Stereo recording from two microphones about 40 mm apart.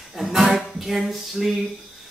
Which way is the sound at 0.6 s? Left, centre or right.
Centre.